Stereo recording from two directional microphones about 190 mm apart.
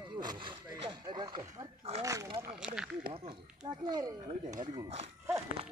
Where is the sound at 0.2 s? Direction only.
25° right (ahead or behind).